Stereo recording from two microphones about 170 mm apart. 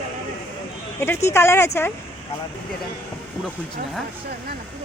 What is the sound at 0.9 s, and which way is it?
Speech, 15° left (ahead or behind).